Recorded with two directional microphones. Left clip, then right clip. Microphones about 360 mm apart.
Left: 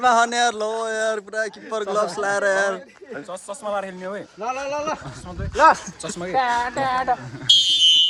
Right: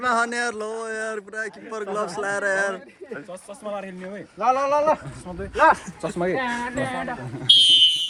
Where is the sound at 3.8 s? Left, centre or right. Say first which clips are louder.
Left 5 dB; left.